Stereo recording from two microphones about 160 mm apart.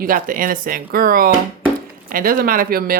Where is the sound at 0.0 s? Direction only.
60° right (ahead or behind).